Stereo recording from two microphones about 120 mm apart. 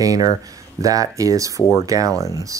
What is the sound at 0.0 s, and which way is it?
Speech, 30° right (ahead or behind).